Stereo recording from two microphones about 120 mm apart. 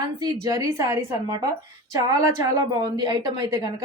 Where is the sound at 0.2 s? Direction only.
35° right (ahead or behind).